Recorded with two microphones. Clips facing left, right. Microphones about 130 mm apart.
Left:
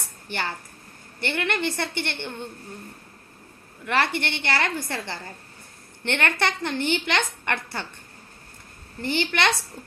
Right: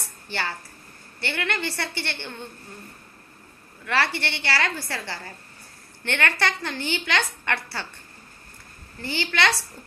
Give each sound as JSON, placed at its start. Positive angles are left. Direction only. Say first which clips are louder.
{"t": 0.3, "sound": "a woman's voice", "louder": "even", "side_deg": 20}
{"t": 3.8, "sound": "a woman's voice", "louder": "left 1 dB", "side_deg": 20}
{"t": 9.1, "sound": "a woman's voice", "louder": "even", "side_deg": 20}